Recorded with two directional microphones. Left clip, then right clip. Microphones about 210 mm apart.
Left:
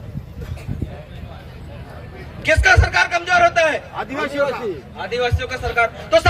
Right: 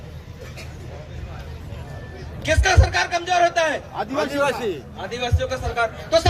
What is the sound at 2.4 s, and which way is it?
A man's voice, 25° right (ahead or behind).